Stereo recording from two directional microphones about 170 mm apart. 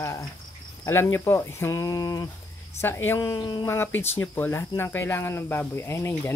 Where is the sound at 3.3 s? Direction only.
25° left (ahead or behind).